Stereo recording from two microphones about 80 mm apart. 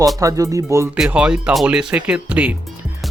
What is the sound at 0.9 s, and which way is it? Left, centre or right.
Speech, centre.